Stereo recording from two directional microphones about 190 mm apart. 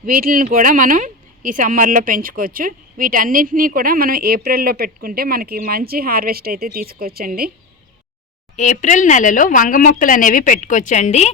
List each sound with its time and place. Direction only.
0.0 s speech: 50° right (ahead or behind)
8.5 s speech: 40° left (ahead or behind)